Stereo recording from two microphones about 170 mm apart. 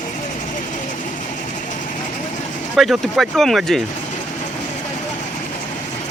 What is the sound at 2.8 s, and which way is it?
Speech, centre (ahead or behind).